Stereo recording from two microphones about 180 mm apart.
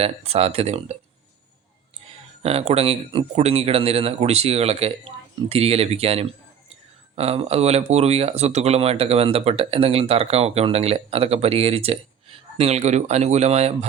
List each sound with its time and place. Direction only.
0.0 s speech: 35° right (ahead or behind)
2.4 s speech: 35° right (ahead or behind)